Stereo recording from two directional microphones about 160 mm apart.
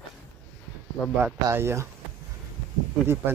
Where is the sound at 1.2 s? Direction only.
15° right (ahead or behind).